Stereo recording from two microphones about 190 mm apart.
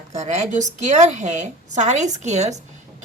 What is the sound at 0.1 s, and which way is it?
A woman's voice, 35° right (ahead or behind).